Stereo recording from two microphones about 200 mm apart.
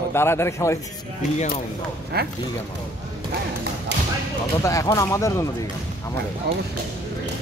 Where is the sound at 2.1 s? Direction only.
50° right (ahead or behind).